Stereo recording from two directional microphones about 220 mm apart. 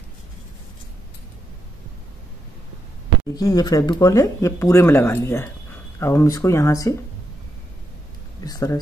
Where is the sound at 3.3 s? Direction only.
15° left (ahead or behind).